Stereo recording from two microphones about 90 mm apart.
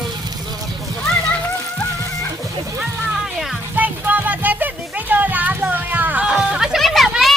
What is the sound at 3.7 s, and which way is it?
Music, 20° right (ahead or behind).